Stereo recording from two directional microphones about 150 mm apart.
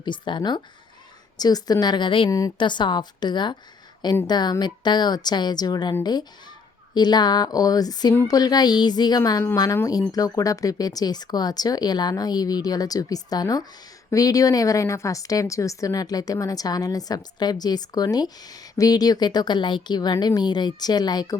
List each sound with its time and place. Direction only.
0.0 s a woman's voice: 30° left (ahead or behind)